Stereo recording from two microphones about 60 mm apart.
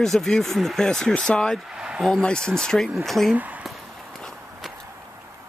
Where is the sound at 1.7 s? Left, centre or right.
Centre.